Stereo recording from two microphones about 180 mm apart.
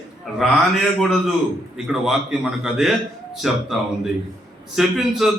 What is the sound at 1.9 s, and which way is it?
A man's voice, 5° right (ahead or behind).